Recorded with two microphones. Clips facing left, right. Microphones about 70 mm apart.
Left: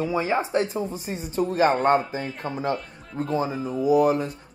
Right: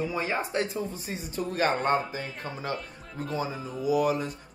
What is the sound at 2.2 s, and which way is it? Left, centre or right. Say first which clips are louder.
Speech: left 5 dB; centre.